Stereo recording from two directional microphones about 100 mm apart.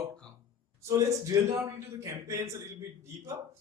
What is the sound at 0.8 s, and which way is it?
A man's voice, 30° right (ahead or behind).